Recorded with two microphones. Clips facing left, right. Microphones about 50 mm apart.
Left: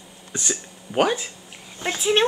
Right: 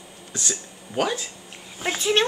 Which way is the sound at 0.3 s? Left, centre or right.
Left.